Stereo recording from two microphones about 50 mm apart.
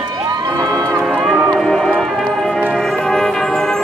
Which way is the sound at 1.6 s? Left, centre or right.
Centre.